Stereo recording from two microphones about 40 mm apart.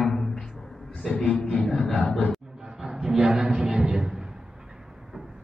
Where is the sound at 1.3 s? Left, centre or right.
Left.